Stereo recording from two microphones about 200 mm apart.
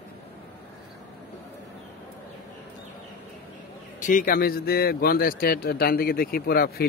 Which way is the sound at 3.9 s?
40° left (ahead or behind).